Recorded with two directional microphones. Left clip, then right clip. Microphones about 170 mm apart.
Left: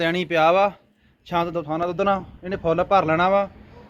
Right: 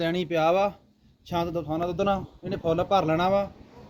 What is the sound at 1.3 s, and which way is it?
Speech, 30° right (ahead or behind).